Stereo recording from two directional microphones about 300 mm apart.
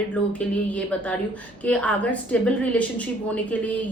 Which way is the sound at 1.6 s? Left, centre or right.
Centre.